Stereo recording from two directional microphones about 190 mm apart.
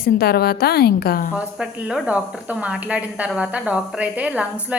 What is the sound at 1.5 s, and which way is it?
A woman's voice, 5° right (ahead or behind).